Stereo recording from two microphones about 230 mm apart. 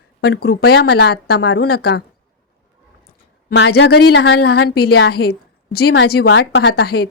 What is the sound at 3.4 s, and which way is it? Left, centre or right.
A woman's voice, left.